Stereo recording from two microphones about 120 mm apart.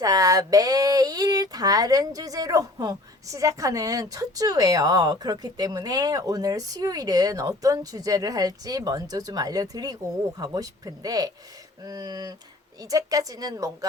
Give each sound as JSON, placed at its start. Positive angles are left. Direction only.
{"t": 0.0, "sound": "speech", "side_deg": -30}